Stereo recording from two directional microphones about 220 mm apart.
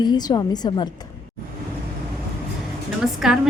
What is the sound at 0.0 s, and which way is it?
Speech, 15° left (ahead or behind).